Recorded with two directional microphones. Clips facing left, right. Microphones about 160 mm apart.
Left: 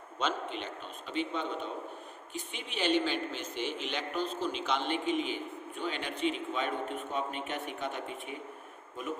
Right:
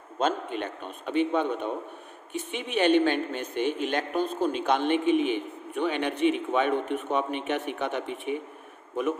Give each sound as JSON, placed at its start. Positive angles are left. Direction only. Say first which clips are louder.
{"t": 0.2, "sound": "a man's voice", "louder": "right 7 dB", "side_deg": -50}